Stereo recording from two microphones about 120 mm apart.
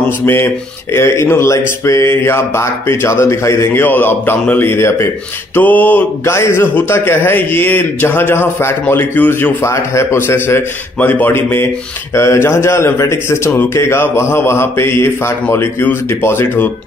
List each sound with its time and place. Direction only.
0.2 s speech: 20° left (ahead or behind)